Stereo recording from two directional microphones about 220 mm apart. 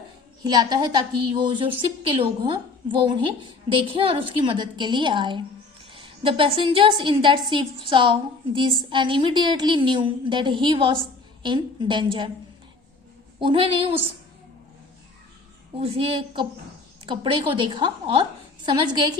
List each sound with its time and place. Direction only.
0.4 s a woman's voice: 20° right (ahead or behind)
13.4 s a woman's voice: 25° right (ahead or behind)
15.8 s a woman's voice: 25° right (ahead or behind)